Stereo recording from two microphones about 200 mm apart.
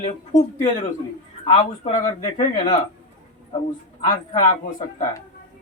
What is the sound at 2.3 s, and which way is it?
Speech, 35° left (ahead or behind).